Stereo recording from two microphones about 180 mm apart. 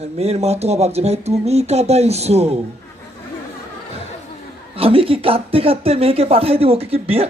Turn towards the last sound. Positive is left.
turn(degrees=-35)  # may be behind; listen again after turning